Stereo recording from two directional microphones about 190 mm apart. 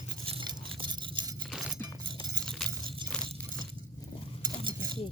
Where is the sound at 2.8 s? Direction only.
25° right (ahead or behind).